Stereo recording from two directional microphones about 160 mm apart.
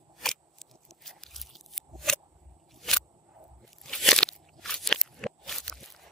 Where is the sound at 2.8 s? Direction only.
Centre (ahead or behind).